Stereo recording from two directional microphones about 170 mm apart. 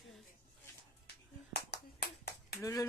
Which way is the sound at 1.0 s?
75° left (ahead or behind).